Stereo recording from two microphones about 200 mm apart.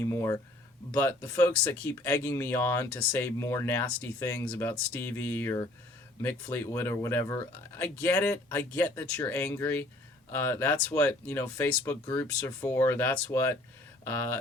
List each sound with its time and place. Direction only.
0.0 s speech: 15° left (ahead or behind)